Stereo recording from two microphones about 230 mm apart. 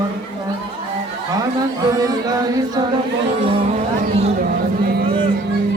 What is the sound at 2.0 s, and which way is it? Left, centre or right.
Speech, centre.